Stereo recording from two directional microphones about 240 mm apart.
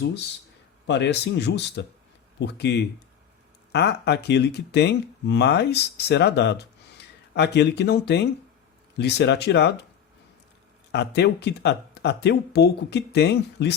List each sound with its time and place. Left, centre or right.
0.0 s speech: left
10.9 s speech: left